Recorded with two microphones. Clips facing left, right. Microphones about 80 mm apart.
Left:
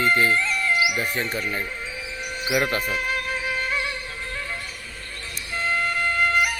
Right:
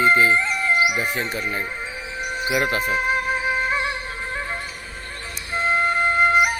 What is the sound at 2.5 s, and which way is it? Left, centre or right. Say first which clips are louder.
Speech: right 1 dB; centre.